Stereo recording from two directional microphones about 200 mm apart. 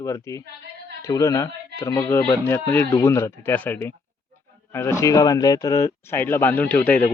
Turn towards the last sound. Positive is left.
turn(degrees=10)  # may be behind; listen again after turning